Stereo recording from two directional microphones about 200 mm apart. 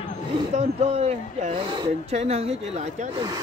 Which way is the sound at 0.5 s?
35° right (ahead or behind).